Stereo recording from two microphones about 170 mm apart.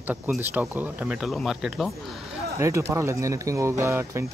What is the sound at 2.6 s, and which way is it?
Speech, 15° right (ahead or behind).